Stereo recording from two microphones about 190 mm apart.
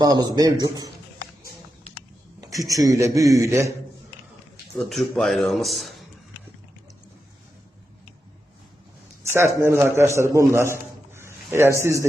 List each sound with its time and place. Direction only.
0.0 s a man's voice: 20° right (ahead or behind)
2.6 s a man's voice: 20° right (ahead or behind)
4.9 s speech: centre (ahead or behind)
9.2 s a man's voice: 15° right (ahead or behind)